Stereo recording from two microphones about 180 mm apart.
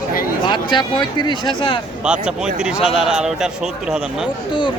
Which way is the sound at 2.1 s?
5° right (ahead or behind).